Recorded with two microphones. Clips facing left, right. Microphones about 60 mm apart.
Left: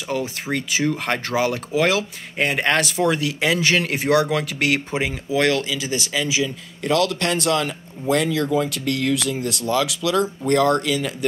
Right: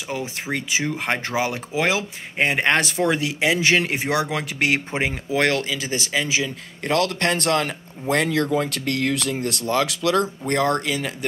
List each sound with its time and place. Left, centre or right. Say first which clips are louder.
0.1 s speech: left 3 dB; centre; by 10.3 s right
10.4 s speech: left 3 dB; right